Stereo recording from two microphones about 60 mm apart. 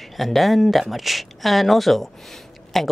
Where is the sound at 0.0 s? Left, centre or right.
Centre.